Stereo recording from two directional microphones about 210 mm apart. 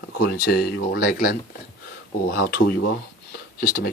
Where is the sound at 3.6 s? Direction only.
40° left (ahead or behind).